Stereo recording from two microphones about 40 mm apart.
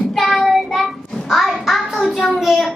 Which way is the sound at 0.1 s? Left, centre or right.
Centre.